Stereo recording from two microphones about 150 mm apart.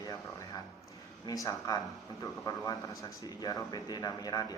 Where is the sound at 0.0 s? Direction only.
20° left (ahead or behind).